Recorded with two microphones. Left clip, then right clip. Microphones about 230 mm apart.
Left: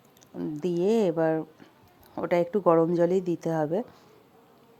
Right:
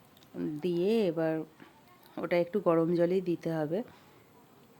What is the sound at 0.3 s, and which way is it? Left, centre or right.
Speech, centre.